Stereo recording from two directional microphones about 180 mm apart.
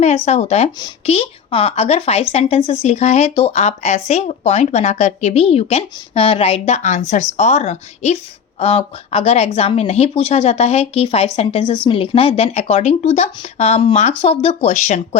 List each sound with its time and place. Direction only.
0.3 s speech: 35° left (ahead or behind)